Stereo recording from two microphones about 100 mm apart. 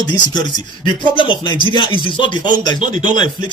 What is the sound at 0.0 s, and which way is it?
Speech, 45° left (ahead or behind).